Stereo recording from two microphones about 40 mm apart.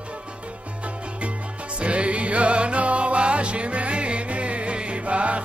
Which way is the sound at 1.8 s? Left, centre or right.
Right.